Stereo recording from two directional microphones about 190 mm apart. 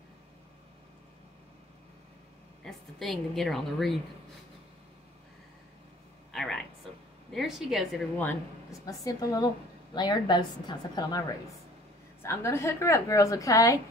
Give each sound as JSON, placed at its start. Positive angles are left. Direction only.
{"t": 2.6, "sound": "a woman's voice", "side_deg": 0}
{"t": 6.3, "sound": "a sound", "side_deg": 0}
{"t": 7.3, "sound": "a woman's voice", "side_deg": 0}
{"t": 8.8, "sound": "a woman's voice", "side_deg": 20}